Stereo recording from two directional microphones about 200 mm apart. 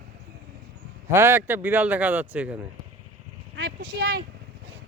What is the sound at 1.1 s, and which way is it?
Speech, 10° right (ahead or behind).